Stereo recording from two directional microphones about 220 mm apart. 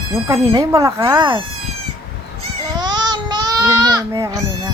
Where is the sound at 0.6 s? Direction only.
15° right (ahead or behind).